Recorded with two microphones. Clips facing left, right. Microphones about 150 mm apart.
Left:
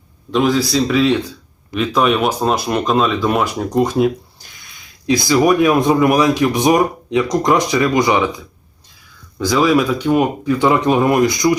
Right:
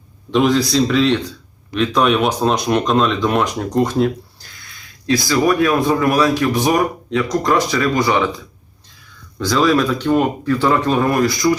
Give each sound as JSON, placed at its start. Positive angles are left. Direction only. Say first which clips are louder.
{"t": 0.3, "sound": "speech", "louder": "even", "side_deg": 0}
{"t": 9.4, "sound": "speech", "louder": "left 1 dB", "side_deg": 10}